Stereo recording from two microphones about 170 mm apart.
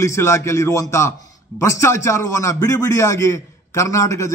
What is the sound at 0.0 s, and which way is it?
A man's voice, 15° left (ahead or behind).